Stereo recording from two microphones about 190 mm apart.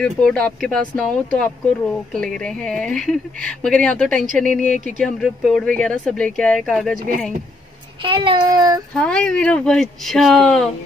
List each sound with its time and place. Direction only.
0.0 s speech: 5° left (ahead or behind)
8.0 s child singing: 25° right (ahead or behind)
8.9 s speech: 5° left (ahead or behind)